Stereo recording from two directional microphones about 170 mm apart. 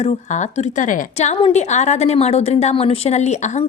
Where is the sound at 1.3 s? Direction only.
35° left (ahead or behind).